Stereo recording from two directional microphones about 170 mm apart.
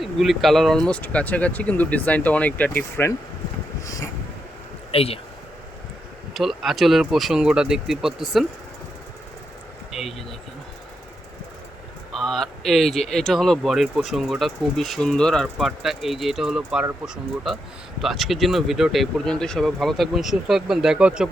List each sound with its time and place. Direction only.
0.0 s speech: centre (ahead or behind)
3.8 s vehicle: 20° left (ahead or behind)
4.9 s speech: 35° left (ahead or behind)
6.3 s speech: centre (ahead or behind)
9.9 s speech: centre (ahead or behind)
12.2 s speech: centre (ahead or behind)
18.0 s speech: centre (ahead or behind)